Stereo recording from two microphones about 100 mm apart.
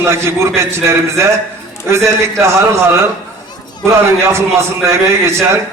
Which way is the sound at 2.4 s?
30° right (ahead or behind).